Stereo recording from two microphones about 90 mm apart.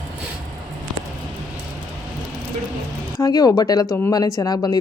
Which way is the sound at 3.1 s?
40° left (ahead or behind).